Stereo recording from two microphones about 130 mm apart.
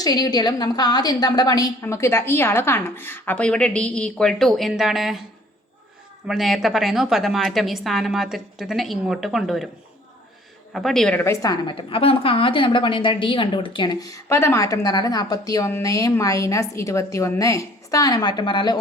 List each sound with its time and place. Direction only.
0.0 s a woman's voice: 30° left (ahead or behind); by 5.2 s 5° right (ahead or behind)
6.2 s a woman's voice: centre (ahead or behind)
10.7 s a woman's voice: centre (ahead or behind)
11.2 s a woman's voice: 20° left (ahead or behind)
11.6 s a woman's voice: 40° left (ahead or behind)